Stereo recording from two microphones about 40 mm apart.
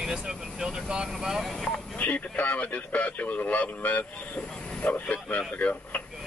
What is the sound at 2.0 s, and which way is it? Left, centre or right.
Speech, left.